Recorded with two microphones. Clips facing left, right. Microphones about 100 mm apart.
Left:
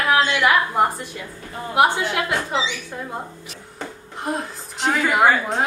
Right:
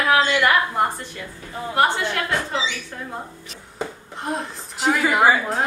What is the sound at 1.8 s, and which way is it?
Speech, 10° left (ahead or behind).